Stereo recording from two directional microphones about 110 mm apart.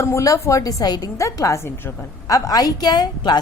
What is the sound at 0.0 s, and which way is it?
A woman's voice, 30° left (ahead or behind).